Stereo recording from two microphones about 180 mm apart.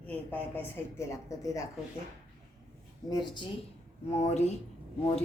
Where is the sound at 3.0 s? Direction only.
20° left (ahead or behind).